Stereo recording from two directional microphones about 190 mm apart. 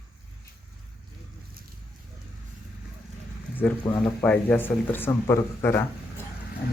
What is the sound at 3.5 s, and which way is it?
Speech, 10° left (ahead or behind).